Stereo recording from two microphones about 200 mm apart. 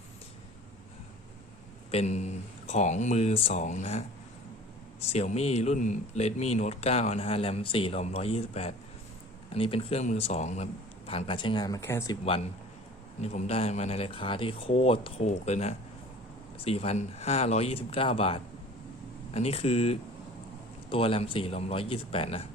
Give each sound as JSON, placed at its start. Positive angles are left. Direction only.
{"t": 1.9, "sound": "speech", "side_deg": 35}
{"t": 5.1, "sound": "speech", "side_deg": 30}
{"t": 13.2, "sound": "speech", "side_deg": 30}